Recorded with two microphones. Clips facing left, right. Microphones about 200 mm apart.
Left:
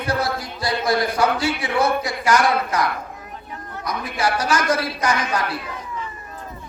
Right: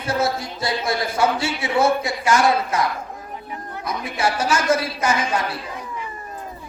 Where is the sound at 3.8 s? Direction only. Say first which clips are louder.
Even; 25° right (ahead or behind).